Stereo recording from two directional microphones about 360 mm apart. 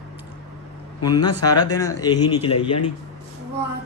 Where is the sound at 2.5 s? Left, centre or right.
Left.